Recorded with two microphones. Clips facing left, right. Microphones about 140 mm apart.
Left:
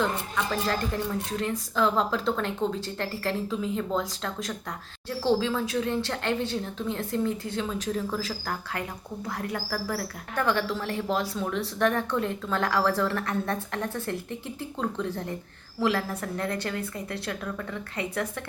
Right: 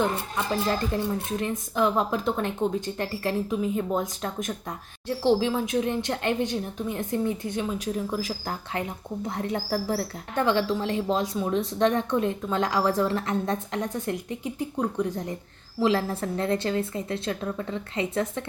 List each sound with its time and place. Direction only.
0.3 s speech: 20° right (ahead or behind)